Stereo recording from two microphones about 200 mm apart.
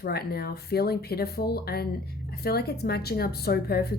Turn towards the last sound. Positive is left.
turn(degrees=50)  # may be behind; listen again after turning